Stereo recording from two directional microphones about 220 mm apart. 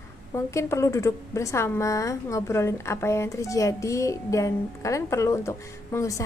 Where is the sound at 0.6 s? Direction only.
15° left (ahead or behind).